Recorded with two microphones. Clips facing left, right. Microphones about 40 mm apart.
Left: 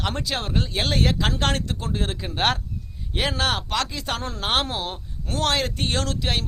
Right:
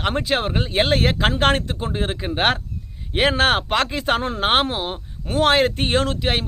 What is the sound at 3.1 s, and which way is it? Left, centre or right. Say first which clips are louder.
Speech: right 7 dB; right.